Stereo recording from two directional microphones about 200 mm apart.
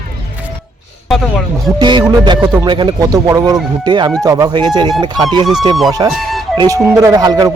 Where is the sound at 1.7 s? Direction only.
25° right (ahead or behind).